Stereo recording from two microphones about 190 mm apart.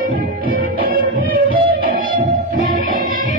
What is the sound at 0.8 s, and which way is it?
Music, 45° right (ahead or behind).